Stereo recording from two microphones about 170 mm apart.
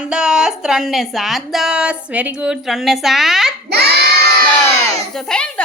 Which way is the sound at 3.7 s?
70° right (ahead or behind).